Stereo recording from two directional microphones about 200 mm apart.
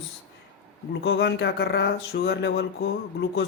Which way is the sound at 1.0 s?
60° left (ahead or behind).